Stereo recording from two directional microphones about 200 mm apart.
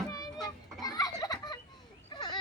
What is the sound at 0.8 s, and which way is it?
Children playing, 20° left (ahead or behind).